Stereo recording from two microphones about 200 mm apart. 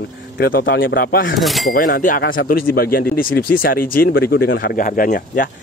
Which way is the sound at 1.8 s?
40° left (ahead or behind).